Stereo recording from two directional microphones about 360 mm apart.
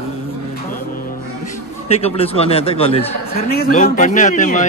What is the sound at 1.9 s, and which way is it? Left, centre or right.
A man's voice, centre.